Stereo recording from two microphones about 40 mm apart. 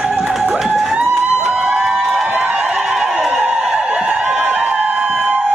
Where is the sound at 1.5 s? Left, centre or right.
Right.